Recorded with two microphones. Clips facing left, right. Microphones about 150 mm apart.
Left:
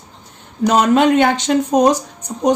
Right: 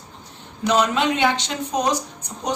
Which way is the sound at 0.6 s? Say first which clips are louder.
Left 7 dB; 50° left (ahead or behind).